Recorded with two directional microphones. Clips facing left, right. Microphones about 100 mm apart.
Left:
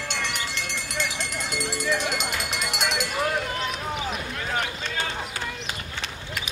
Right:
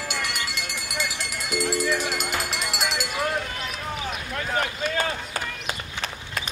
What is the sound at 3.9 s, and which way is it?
Run, 5° right (ahead or behind).